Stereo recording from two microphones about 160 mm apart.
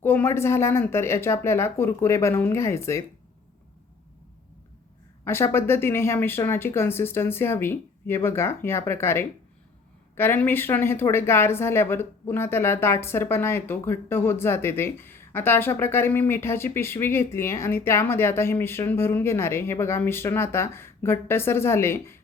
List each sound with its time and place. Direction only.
0.0 s speech: 10° left (ahead or behind)
5.2 s speech: 15° left (ahead or behind)